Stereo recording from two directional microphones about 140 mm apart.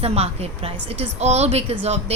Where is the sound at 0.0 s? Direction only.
45° right (ahead or behind).